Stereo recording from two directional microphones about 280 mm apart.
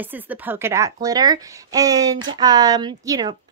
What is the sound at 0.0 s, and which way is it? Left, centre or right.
Speech, centre.